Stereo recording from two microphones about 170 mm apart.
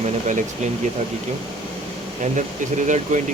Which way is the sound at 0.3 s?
45° right (ahead or behind).